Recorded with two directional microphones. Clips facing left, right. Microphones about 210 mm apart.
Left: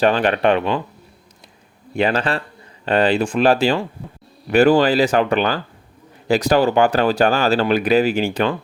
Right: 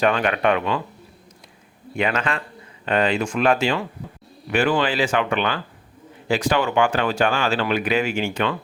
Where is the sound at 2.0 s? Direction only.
35° left (ahead or behind).